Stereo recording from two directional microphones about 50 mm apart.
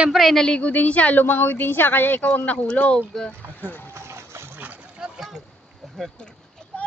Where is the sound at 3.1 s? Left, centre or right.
Centre.